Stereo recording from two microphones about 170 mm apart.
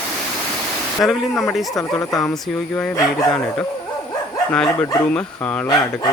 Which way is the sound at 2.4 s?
Centre (ahead or behind).